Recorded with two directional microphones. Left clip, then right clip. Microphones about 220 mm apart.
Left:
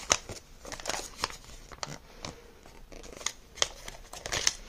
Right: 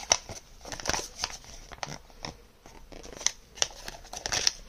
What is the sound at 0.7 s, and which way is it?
Crumpling, 5° right (ahead or behind).